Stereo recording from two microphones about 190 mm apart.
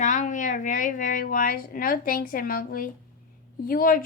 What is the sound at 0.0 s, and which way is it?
A woman's voice, 40° left (ahead or behind).